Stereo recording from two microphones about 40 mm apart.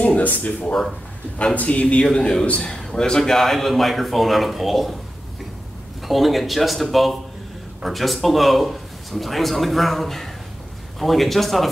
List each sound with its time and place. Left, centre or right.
0.0 s a sound: left
1.4 s a man's voice: left; by 4.9 s centre
6.0 s a man's voice: centre